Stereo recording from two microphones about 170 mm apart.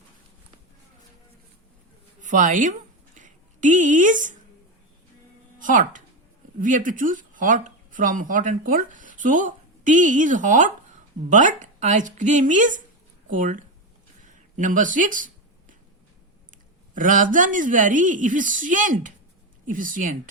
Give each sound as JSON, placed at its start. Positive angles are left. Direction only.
{"t": 2.2, "sound": "a woman's voice", "side_deg": -50}
{"t": 3.2, "sound": "a sound", "side_deg": -45}
{"t": 5.5, "sound": "a woman's voice", "side_deg": -50}
{"t": 16.9, "sound": "a woman's voice", "side_deg": -50}